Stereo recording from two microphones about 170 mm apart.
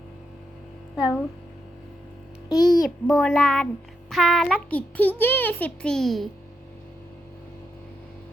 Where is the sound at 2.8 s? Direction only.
Centre (ahead or behind).